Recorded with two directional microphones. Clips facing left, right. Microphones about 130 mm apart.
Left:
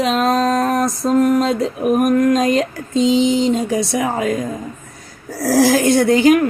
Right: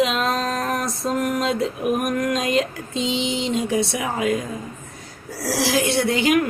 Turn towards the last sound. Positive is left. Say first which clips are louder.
# left 7 dB
turn(degrees=40)  # may be behind; listen again after turning